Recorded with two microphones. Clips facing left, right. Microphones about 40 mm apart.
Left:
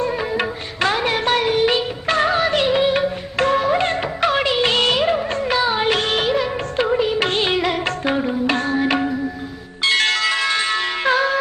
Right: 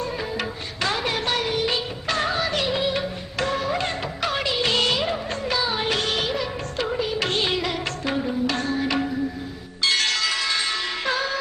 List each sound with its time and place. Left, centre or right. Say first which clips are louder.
0.0 s music: left 7 dB; left